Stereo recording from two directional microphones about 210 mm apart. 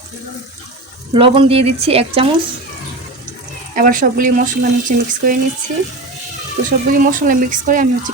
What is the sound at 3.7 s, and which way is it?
Speech, 40° right (ahead or behind).